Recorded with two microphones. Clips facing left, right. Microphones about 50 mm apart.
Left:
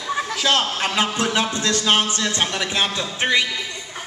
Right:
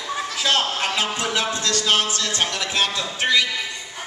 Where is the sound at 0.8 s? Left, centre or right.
Left.